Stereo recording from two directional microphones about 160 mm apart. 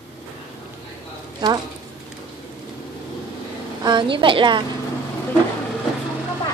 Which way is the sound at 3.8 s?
30° right (ahead or behind).